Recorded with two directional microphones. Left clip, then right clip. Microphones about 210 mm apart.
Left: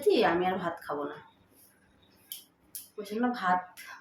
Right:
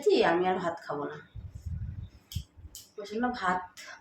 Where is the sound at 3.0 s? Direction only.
Centre (ahead or behind).